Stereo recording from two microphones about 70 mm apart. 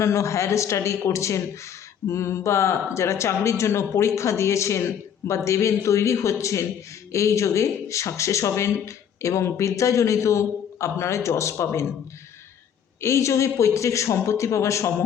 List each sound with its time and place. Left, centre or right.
0.0 s speech: left
13.0 s speech: left